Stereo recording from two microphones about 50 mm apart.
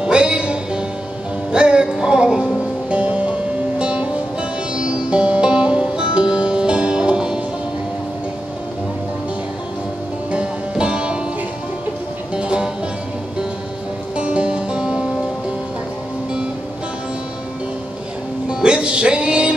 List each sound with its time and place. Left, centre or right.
0.0 s music: centre
10.3 s music: right
12.4 s music: right
14.1 s music: right
18.5 s music: centre